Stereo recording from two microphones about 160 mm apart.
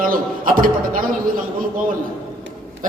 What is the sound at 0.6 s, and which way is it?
Speech, 60° right (ahead or behind).